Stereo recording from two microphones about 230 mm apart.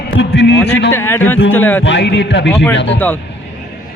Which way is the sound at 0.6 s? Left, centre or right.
Left.